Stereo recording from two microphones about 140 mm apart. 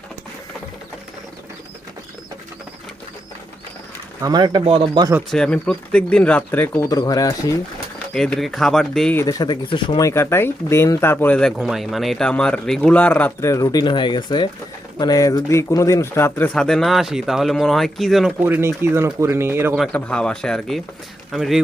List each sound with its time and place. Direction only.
4.2 s speech: 30° right (ahead or behind)
5.3 s speech: 5° left (ahead or behind)
6.8 s speech: 25° left (ahead or behind)
8.1 s speech: 5° left (ahead or behind)
9.1 s speech: 25° left (ahead or behind)
10.0 s speech: 20° left (ahead or behind)
16.6 s speech: 5° left (ahead or behind)
18.4 s speech: 15° right (ahead or behind)
19.9 s speech: 5° left (ahead or behind)